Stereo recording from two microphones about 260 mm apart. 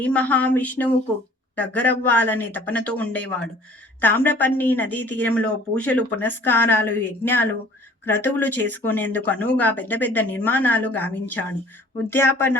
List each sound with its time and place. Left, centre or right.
0.0 s speech: centre